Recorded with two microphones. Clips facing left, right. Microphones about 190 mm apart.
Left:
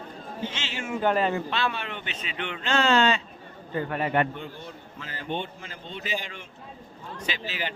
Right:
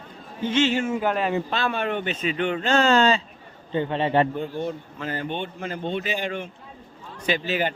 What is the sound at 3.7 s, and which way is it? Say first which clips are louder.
Speech: right 4 dB; 25° right (ahead or behind).